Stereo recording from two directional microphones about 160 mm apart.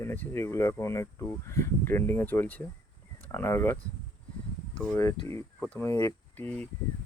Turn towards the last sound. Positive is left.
turn(degrees=10)  # may be behind; listen again after turning